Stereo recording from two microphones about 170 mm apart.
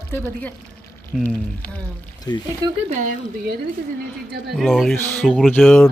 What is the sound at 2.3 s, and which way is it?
Speech, 25° left (ahead or behind).